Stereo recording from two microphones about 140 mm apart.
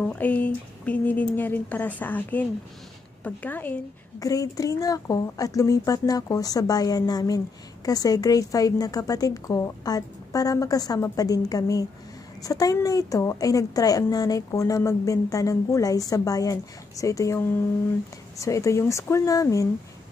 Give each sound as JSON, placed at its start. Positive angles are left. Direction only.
{"t": 0.0, "sound": "speech", "side_deg": 10}
{"t": 4.2, "sound": "speech", "side_deg": 25}